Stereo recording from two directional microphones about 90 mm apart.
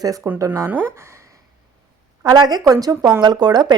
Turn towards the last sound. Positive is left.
turn(degrees=-50)  # may be behind; listen again after turning